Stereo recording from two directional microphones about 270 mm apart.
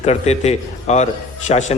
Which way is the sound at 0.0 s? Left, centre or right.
Left.